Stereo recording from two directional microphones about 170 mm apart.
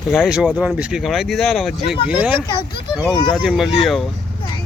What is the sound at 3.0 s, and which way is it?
Speech, 25° left (ahead or behind).